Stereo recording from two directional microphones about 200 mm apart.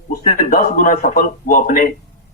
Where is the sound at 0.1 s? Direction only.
40° left (ahead or behind).